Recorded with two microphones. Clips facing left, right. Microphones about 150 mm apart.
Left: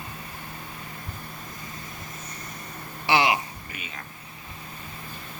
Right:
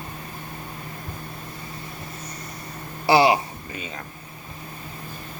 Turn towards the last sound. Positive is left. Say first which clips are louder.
# right 4 dB
turn(degrees=-30)  # may be behind; listen again after turning